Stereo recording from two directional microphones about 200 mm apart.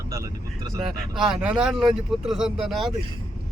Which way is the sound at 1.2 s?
5° right (ahead or behind).